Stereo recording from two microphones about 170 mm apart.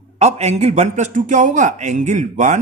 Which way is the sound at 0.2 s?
40° right (ahead or behind).